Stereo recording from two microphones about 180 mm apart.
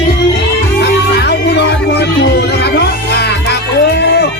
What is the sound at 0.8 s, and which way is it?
Music, 70° left (ahead or behind).